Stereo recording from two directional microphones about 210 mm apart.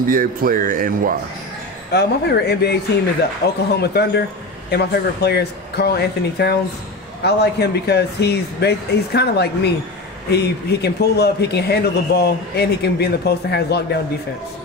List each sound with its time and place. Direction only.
0.1 s a man's voice: 40° right (ahead or behind)
1.9 s a man's voice: 50° left (ahead or behind)